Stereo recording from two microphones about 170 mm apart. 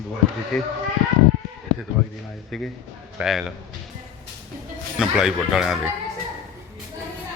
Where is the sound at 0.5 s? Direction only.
Centre (ahead or behind).